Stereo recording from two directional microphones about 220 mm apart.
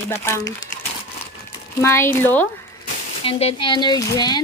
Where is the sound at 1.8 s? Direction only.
10° left (ahead or behind).